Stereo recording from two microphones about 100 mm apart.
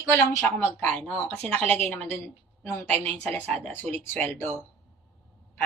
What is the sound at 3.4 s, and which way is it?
Speech, 90° right.